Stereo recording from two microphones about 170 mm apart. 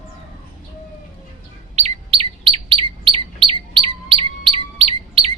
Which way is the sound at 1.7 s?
35° right (ahead or behind).